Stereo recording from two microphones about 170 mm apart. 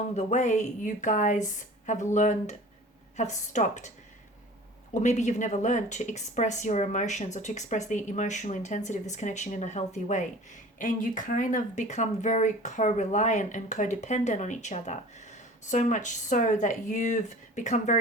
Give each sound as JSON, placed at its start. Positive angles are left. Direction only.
{"t": 0.2, "sound": "a woman's voice", "side_deg": 45}
{"t": 4.9, "sound": "a woman's voice", "side_deg": 45}